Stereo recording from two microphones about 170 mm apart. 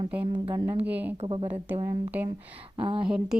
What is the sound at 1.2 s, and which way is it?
Speech, 35° right (ahead or behind).